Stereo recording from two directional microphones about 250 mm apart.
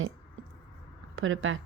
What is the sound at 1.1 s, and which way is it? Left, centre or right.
Speech, right.